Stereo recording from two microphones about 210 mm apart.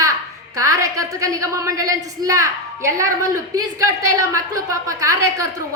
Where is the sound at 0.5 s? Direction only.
15° right (ahead or behind).